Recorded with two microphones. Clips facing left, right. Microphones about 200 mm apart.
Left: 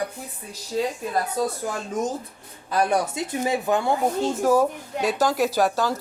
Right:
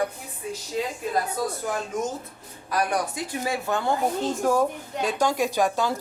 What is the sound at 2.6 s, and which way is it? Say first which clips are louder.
Speech: left 3 dB; 25° left (ahead or behind).